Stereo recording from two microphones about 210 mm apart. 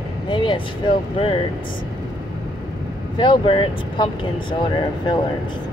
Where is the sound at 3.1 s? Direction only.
20° left (ahead or behind).